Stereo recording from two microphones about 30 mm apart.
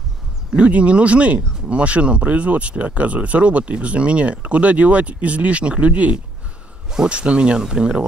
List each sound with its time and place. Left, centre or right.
0.6 s speech: right
7.5 s speech: right